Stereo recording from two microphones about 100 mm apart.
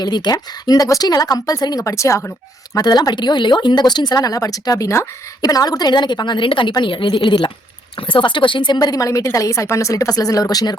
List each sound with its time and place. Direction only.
0.0 s a woman's voice: 45° left (ahead or behind)
2.7 s a woman's voice: 40° left (ahead or behind)